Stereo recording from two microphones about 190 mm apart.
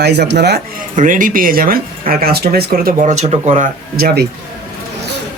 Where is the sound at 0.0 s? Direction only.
60° right (ahead or behind).